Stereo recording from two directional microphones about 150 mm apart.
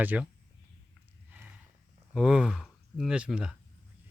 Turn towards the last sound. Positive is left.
turn(degrees=-5)  # may be behind; listen again after turning